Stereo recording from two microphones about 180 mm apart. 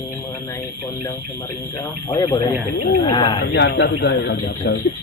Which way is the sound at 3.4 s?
70° left (ahead or behind).